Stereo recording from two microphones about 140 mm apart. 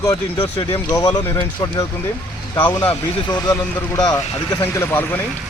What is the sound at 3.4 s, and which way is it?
Speech, 25° left (ahead or behind).